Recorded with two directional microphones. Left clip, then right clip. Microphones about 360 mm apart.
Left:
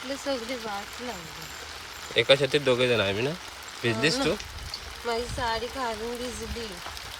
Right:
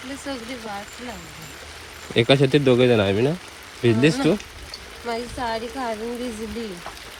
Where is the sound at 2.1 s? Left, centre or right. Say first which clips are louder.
Right 4 dB; centre.